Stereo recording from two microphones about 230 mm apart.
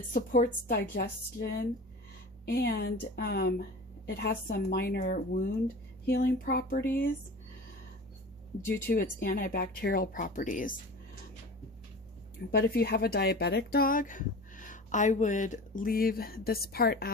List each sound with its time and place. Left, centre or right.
0.1 s a woman's voice: left
8.7 s speech: left
12.5 s speech: left